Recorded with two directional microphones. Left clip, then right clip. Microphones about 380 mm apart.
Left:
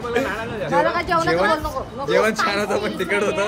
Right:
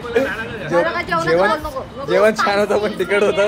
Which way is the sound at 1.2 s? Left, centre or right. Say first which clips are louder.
Right 5 dB; centre.